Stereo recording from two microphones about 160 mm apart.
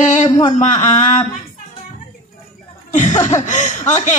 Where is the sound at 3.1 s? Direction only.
20° left (ahead or behind).